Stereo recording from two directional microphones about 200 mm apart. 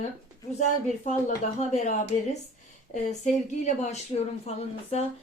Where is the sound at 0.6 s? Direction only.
40° left (ahead or behind).